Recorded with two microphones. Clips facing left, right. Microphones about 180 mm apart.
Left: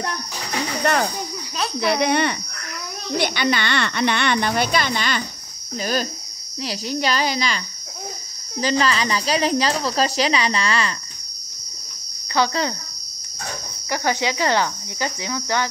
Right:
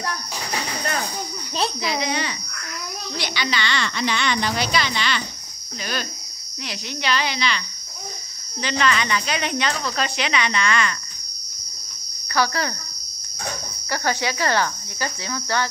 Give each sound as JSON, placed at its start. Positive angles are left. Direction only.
{"t": 1.8, "sound": "a child's voice", "side_deg": 60}
{"t": 6.6, "sound": "speech", "side_deg": 35}
{"t": 12.4, "sound": "speech", "side_deg": 20}
{"t": 13.8, "sound": "cricket", "side_deg": 15}